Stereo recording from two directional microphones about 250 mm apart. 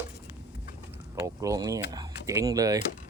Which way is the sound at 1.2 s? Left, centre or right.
Centre.